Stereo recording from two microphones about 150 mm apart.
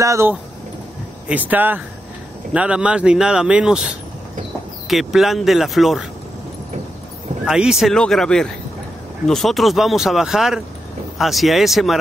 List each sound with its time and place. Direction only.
0.0 s speech: 20° right (ahead or behind)
1.3 s speech: 10° right (ahead or behind)
7.4 s speech: 5° right (ahead or behind)